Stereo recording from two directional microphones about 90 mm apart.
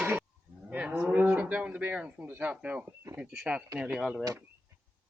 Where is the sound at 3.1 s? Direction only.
10° right (ahead or behind).